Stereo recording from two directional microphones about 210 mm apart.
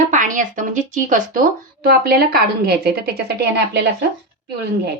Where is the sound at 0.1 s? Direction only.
40° right (ahead or behind).